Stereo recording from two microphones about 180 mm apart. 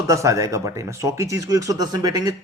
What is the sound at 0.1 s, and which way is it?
Speech, 15° right (ahead or behind).